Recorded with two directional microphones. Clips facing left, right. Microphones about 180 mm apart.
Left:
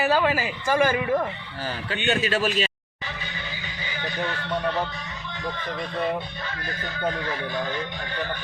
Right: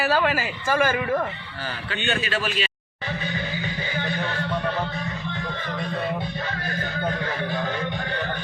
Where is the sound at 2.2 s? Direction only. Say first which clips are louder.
Left 3 dB; 40° left (ahead or behind).